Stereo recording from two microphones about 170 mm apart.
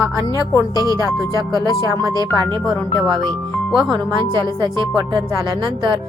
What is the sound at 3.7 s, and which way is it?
Speech, centre (ahead or behind).